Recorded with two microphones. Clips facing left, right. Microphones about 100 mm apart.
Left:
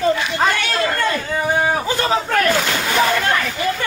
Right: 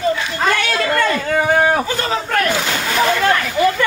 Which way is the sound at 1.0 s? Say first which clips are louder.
Right 4 dB; 65° right (ahead or behind).